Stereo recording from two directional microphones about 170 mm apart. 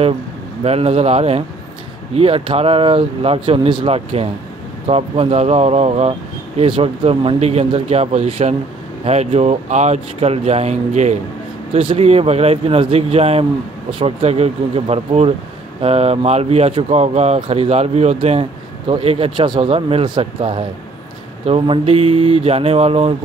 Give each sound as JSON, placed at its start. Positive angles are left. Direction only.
{"t": 0.7, "sound": "speech", "side_deg": -35}